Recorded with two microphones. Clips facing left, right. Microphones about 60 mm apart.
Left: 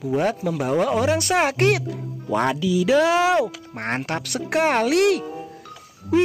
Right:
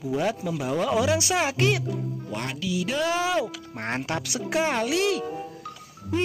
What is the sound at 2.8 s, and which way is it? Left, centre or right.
Speech, left.